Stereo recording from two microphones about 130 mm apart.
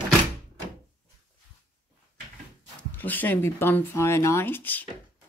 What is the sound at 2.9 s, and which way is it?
Speech, 15° left (ahead or behind).